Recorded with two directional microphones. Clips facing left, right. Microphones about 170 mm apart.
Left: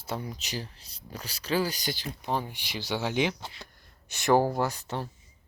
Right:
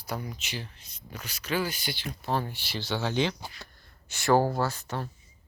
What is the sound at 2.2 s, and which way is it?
Speech, 15° left (ahead or behind).